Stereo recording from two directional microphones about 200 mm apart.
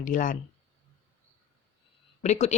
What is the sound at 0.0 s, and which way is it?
Speech, 40° left (ahead or behind).